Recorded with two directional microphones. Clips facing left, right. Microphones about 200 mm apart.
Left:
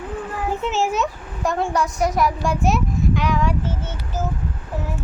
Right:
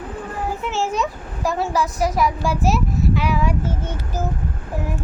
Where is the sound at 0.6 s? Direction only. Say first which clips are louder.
Left 3 dB; 15° left (ahead or behind).